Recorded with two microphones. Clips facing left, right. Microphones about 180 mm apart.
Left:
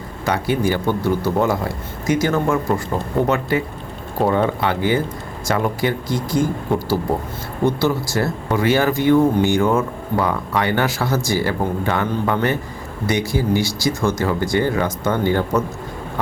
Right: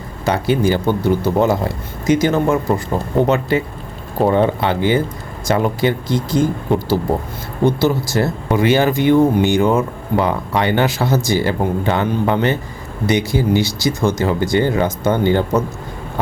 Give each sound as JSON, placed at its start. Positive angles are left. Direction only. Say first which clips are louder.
{"t": 0.3, "sound": "speech", "louder": "right 3 dB", "side_deg": -25}